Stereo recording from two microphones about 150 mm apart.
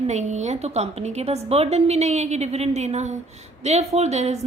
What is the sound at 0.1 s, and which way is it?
Speech, 50° right (ahead or behind).